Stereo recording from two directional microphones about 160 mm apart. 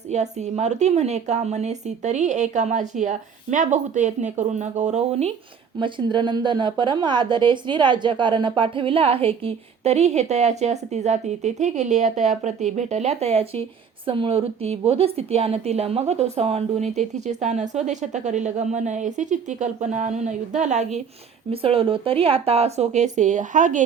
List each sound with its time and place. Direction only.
0.1 s a woman's voice: 45° right (ahead or behind)
5.8 s a woman's voice: 30° right (ahead or behind); by 21.0 s 45° right (ahead or behind)
21.5 s a woman's voice: 35° right (ahead or behind); by 23.8 s 50° right (ahead or behind)